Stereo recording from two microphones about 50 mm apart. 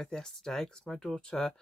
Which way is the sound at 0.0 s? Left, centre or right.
Centre.